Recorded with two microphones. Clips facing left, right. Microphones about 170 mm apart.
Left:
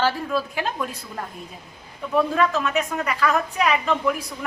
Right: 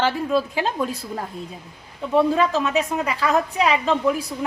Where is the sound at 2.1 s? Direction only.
25° right (ahead or behind).